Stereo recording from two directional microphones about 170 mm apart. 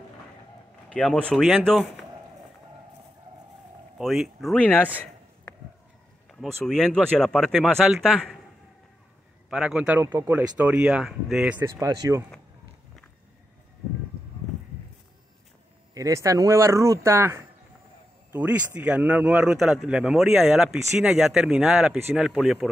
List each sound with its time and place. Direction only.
0.9 s speech: 5° left (ahead or behind)
4.0 s a man's voice: centre (ahead or behind)
9.5 s speech: 5° right (ahead or behind)
11.6 s speech: 20° right (ahead or behind)
15.9 s speech: 20° right (ahead or behind); by 22.7 s centre (ahead or behind)